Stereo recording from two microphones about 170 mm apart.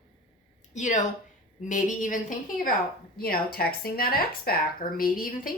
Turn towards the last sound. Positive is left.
turn(degrees=55)  # may be behind; listen again after turning